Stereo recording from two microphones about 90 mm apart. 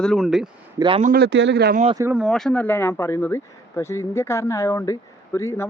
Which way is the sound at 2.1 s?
Centre (ahead or behind).